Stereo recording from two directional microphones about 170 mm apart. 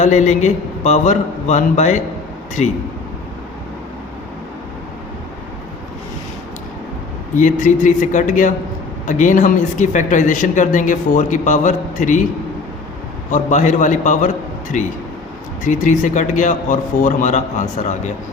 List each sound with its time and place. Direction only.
0.0 s speech: 45° left (ahead or behind)
7.3 s speech: 50° left (ahead or behind)
13.3 s speech: 45° left (ahead or behind)